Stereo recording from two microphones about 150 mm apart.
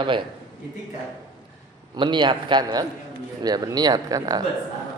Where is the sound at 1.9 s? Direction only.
30° right (ahead or behind).